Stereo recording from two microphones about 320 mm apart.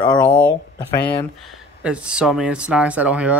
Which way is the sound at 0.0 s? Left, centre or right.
Centre.